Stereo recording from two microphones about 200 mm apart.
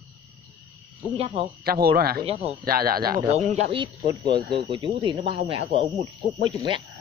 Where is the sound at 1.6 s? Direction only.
50° right (ahead or behind).